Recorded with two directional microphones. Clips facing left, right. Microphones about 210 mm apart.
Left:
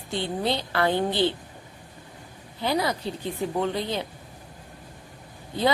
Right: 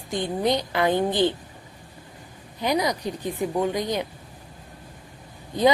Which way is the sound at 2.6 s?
15° right (ahead or behind).